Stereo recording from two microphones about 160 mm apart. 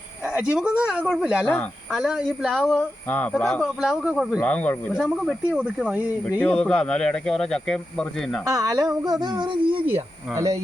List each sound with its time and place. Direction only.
0.3 s speech: 10° right (ahead or behind)
1.5 s speech: 10° left (ahead or behind)
2.0 s speech: 5° right (ahead or behind)
4.4 s speech: 10° left (ahead or behind)
4.9 s speech: 5° right (ahead or behind)
6.4 s speech: 5° left (ahead or behind)
8.4 s a sound: 20° right (ahead or behind)
10.3 s a sound: 20° right (ahead or behind)